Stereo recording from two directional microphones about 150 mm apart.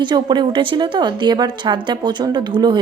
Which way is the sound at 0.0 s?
30° right (ahead or behind).